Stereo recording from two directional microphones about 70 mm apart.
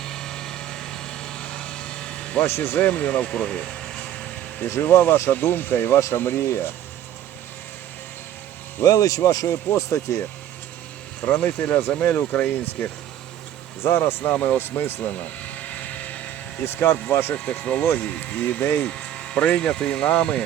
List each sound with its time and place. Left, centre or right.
0.0 s vehicle: centre
2.5 s speech: left
2.9 s speech: centre
4.8 s speech: left
8.8 s speech: left
11.3 s speech: left
13.8 s speech: left
14.3 s speech: centre
14.6 s speech: left
15.1 s vehicle: left
16.6 s speech: left
17.3 s speech: left
18.6 s speech: left
18.9 s speech: centre